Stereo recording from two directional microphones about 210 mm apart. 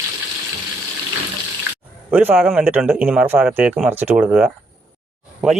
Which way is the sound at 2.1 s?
10° right (ahead or behind).